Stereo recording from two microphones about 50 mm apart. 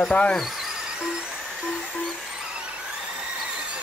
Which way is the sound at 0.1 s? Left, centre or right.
Left.